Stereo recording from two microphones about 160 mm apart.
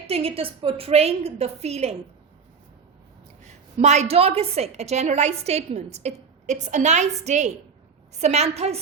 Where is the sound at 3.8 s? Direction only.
45° right (ahead or behind).